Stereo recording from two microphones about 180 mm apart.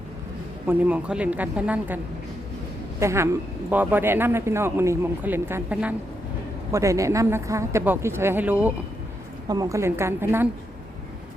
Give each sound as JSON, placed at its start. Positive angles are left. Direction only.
{"t": 0.7, "sound": "a man's voice", "side_deg": -10}
{"t": 3.0, "sound": "a man's voice", "side_deg": -15}
{"t": 9.5, "sound": "a man's voice", "side_deg": -20}